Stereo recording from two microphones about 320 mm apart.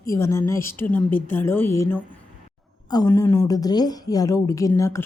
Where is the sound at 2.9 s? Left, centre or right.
Centre.